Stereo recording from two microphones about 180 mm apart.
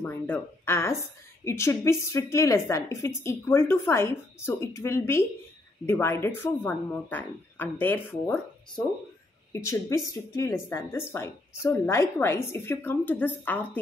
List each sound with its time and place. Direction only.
0.0 s speech: 10° left (ahead or behind)